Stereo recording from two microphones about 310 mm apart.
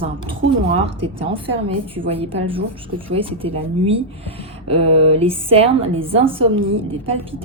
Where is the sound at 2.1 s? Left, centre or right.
Centre.